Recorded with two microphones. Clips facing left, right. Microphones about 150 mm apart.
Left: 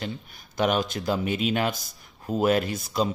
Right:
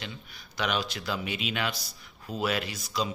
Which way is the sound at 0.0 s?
45° left (ahead or behind).